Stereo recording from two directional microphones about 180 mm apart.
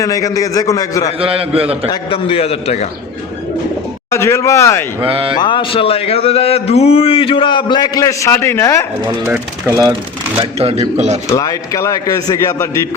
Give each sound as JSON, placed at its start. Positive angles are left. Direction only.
{"t": 0.0, "sound": "a man's voice", "side_deg": 20}
{"t": 1.2, "sound": "a man's voice", "side_deg": -30}
{"t": 1.9, "sound": "a man's voice", "side_deg": 30}
{"t": 4.1, "sound": "speech", "side_deg": 15}
{"t": 4.9, "sound": "a man's voice", "side_deg": -30}
{"t": 5.4, "sound": "a man's voice", "side_deg": 25}
{"t": 9.3, "sound": "speech", "side_deg": -15}
{"t": 10.6, "sound": "a man's voice", "side_deg": -35}
{"t": 11.3, "sound": "a man's voice", "side_deg": 20}